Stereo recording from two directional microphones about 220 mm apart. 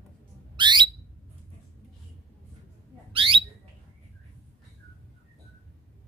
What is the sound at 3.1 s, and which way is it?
Bird, 25° right (ahead or behind).